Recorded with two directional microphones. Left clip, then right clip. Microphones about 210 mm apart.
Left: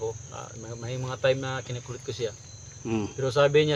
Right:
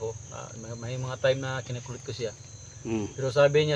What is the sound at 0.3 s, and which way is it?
Speech, 20° left (ahead or behind).